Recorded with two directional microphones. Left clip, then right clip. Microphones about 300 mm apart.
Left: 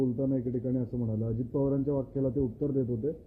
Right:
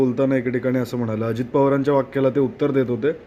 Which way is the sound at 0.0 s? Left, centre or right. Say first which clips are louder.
Right 11 dB; right.